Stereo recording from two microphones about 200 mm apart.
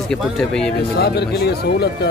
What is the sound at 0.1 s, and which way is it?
Speech, 5° left (ahead or behind).